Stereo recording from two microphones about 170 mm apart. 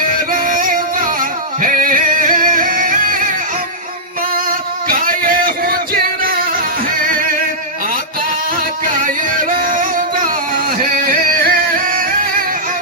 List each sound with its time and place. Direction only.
0.3 s music: 50° right (ahead or behind)
4.9 s music: 55° right (ahead or behind)
8.9 s music: 50° right (ahead or behind)
10.2 s music: 50° right (ahead or behind)